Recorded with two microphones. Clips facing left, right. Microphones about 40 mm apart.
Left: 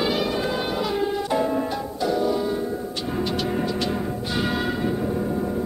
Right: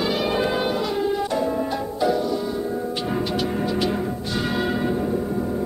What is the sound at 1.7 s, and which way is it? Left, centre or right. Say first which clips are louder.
Music: right 3 dB; centre.